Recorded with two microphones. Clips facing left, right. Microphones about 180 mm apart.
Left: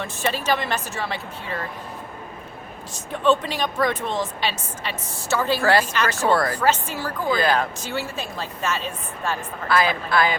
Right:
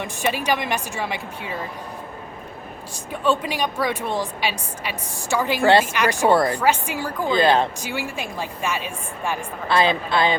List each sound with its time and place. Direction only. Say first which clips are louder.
0.0 s a woman's voice: right 1 dB; 15° right (ahead or behind)
2.9 s a woman's voice: left 2 dB; 10° right (ahead or behind); by 7.7 s 25° right (ahead or behind)
7.8 s a woman's voice: even; 15° right (ahead or behind)
9.6 s a woman's voice: right 2 dB; 25° right (ahead or behind)